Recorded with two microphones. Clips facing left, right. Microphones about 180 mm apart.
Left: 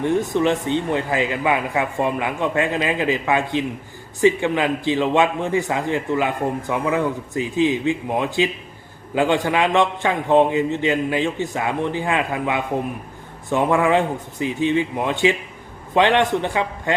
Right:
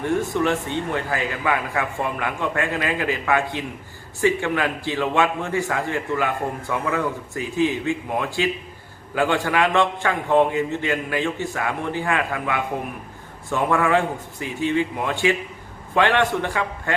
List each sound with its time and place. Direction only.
0.0 s a man's voice: 20° left (ahead or behind)